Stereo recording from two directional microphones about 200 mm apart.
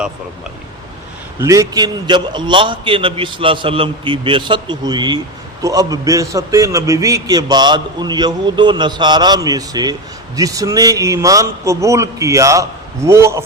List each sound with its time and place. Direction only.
1.4 s a man's voice: 15° right (ahead or behind)